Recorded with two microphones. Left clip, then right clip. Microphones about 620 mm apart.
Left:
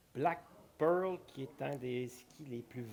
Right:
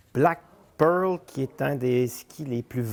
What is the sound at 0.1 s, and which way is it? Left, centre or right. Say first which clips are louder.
Speech: right 13 dB; right.